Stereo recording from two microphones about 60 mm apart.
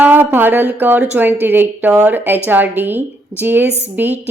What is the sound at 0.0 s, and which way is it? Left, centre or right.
Mantra, right.